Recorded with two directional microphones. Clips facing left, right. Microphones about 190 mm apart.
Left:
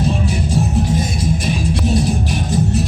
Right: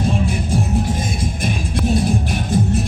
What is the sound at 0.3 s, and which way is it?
Music, 55° right (ahead or behind).